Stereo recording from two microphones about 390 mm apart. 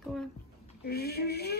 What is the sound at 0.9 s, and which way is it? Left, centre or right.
Speech, left.